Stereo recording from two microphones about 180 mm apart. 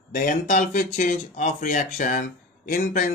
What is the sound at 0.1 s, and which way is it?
Speech, 50° left (ahead or behind).